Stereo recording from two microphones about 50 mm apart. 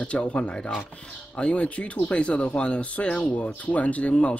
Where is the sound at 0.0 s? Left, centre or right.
Left.